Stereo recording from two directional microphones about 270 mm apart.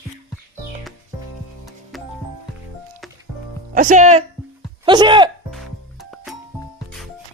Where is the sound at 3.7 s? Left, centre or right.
Right.